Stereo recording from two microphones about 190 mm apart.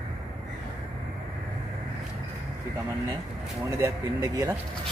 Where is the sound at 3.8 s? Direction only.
15° right (ahead or behind).